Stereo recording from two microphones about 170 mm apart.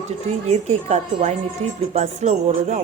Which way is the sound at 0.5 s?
40° right (ahead or behind).